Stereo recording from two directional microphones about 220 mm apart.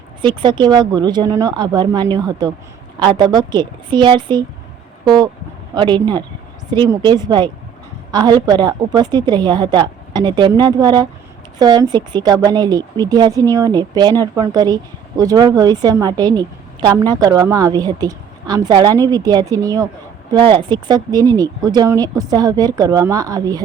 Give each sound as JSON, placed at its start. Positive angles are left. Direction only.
{"t": 0.2, "sound": "a woman's voice", "side_deg": -20}